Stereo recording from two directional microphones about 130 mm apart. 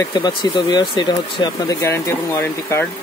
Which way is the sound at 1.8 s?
20° left (ahead or behind).